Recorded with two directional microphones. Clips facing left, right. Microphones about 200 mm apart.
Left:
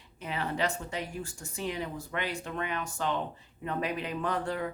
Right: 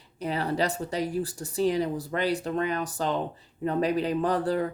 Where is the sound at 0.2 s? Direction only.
40° right (ahead or behind).